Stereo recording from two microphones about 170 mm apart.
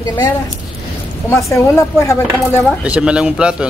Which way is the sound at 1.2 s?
15° left (ahead or behind).